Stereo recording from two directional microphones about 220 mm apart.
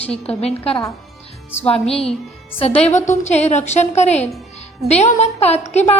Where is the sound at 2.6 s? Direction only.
30° left (ahead or behind).